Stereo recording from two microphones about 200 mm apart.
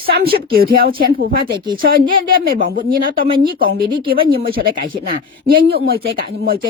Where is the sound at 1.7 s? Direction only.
45° right (ahead or behind).